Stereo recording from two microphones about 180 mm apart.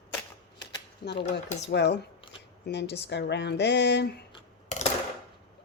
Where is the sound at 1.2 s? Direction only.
40° left (ahead or behind).